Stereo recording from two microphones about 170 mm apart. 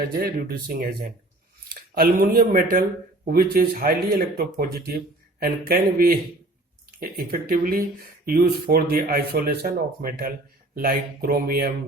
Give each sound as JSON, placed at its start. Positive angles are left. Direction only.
{"t": 0.2, "sound": "speech", "side_deg": -60}